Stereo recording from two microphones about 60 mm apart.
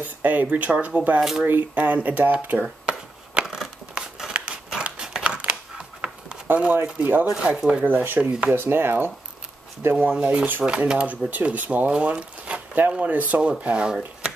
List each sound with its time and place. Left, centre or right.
0.0 s speech: right
2.9 s a sound: centre
3.9 s scissors: centre
4.8 s crumpling: centre
6.4 s speech: right
7.3 s speech: centre
7.8 s speech: right
8.2 s speech: centre
8.5 s speech: right
9.9 s speech: right
11.9 s a sound: centre
12.9 s speech: right